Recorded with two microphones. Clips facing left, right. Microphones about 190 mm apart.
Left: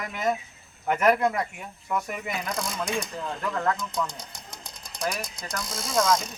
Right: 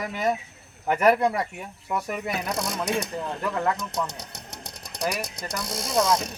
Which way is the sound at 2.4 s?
65° right (ahead or behind).